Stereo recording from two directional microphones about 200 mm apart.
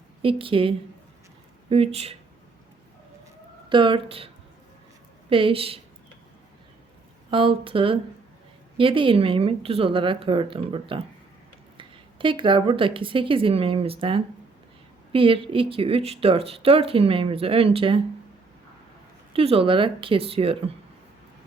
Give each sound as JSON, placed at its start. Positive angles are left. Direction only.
{"t": 0.2, "sound": "speech", "side_deg": -25}
{"t": 3.7, "sound": "speech", "side_deg": -25}
{"t": 5.3, "sound": "speech", "side_deg": -25}
{"t": 7.3, "sound": "speech", "side_deg": -25}
{"t": 19.3, "sound": "speech", "side_deg": -30}